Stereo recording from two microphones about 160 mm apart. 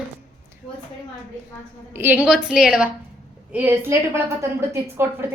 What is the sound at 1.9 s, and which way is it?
A woman's voice, 15° right (ahead or behind).